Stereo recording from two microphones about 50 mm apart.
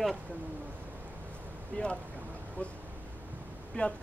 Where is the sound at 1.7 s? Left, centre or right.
Left.